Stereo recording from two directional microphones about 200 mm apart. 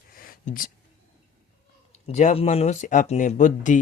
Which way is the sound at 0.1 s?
45° left (ahead or behind).